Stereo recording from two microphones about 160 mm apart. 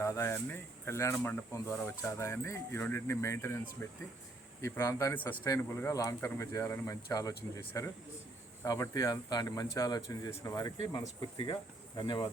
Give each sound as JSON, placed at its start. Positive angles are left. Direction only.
{"t": 0.0, "sound": "speech", "side_deg": 15}
{"t": 8.6, "sound": "speech", "side_deg": 20}